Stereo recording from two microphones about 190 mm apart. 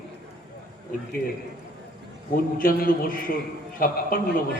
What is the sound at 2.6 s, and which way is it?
A man's voice, 50° left (ahead or behind).